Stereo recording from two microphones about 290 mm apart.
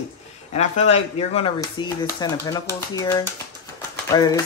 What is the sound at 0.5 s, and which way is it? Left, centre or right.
Speech, left.